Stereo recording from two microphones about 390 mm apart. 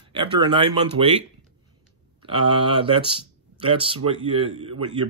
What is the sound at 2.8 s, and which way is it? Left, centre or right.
Speech, centre.